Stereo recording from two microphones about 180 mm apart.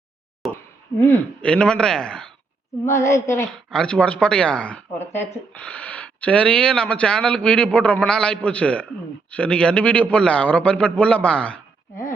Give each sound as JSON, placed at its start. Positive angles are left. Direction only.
{"t": 0.4, "sound": "speech", "side_deg": 10}
{"t": 2.8, "sound": "speech", "side_deg": 15}
{"t": 3.7, "sound": "speech", "side_deg": 5}